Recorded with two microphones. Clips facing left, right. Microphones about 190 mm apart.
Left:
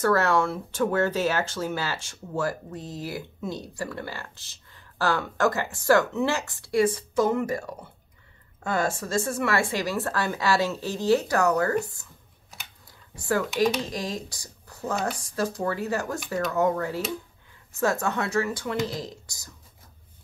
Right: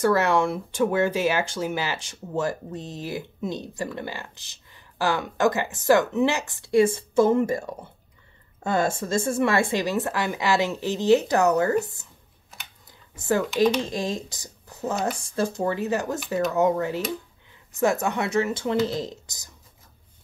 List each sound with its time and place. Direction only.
0.0 s speech: 15° right (ahead or behind)
13.1 s speech: 20° right (ahead or behind)